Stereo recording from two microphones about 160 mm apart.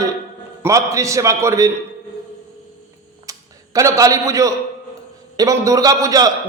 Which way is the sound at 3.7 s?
20° right (ahead or behind).